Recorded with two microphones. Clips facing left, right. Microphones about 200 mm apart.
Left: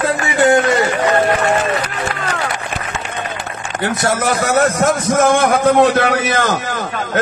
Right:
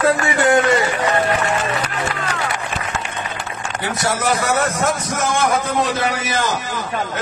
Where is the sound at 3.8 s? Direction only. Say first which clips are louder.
Left 4 dB; 55° left (ahead or behind).